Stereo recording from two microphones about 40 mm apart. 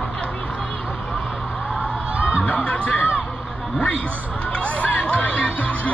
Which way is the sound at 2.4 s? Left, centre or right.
Left.